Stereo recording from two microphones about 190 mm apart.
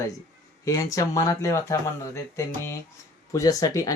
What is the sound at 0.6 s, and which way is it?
Speech, 15° left (ahead or behind).